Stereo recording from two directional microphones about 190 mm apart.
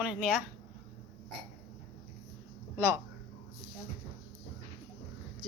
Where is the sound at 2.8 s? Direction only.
10° right (ahead or behind).